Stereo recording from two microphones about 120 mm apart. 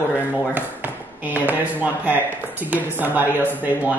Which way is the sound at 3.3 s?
15° left (ahead or behind).